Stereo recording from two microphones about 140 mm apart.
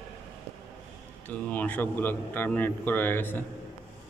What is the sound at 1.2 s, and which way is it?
A man's voice, 10° left (ahead or behind).